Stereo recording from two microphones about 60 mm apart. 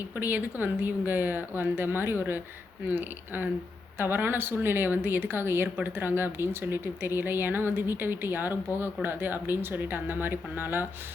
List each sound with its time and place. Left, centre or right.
0.2 s speech: right